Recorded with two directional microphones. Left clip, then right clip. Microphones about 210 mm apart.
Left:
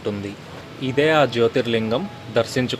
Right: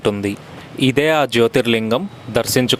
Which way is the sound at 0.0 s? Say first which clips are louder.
Right 8 dB; 40° right (ahead or behind).